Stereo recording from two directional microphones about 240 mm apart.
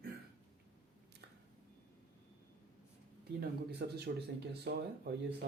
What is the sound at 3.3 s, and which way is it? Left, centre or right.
Speech, right.